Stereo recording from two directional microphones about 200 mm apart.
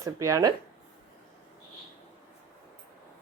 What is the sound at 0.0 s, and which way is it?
Speech, 15° right (ahead or behind).